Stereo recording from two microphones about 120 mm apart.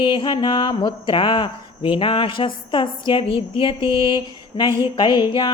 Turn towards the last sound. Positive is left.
turn(degrees=40)  # may be behind; listen again after turning